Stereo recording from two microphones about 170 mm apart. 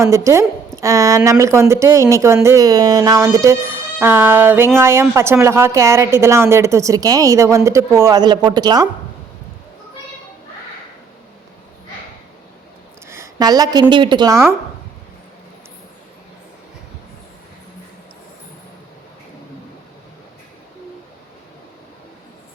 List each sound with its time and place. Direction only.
0.0 s speech: 15° right (ahead or behind)
13.1 s a sound: 15° right (ahead or behind)
13.9 s a woman's voice: 30° right (ahead or behind)